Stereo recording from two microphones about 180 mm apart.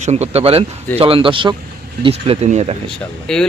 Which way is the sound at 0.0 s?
40° right (ahead or behind).